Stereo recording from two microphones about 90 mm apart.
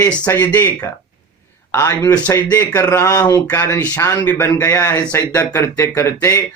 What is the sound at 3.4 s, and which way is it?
Speech, 20° left (ahead or behind).